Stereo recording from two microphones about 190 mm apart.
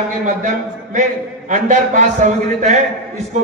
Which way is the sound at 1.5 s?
40° right (ahead or behind).